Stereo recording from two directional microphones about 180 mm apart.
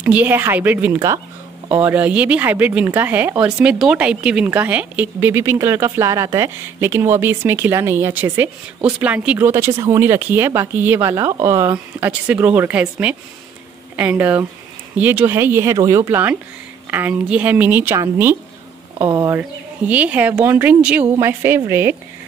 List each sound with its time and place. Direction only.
0.0 s speech: 10° right (ahead or behind)
19.9 s speech: 10° right (ahead or behind)